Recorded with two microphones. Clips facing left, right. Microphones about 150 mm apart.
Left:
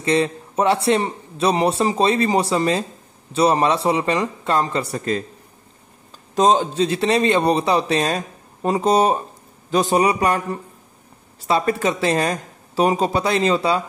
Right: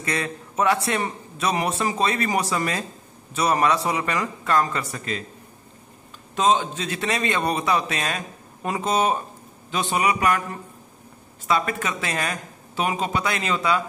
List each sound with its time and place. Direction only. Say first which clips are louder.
0.0 s a man's voice: left 9 dB; 25° left (ahead or behind)
6.3 s speech: left 5 dB; 35° left (ahead or behind)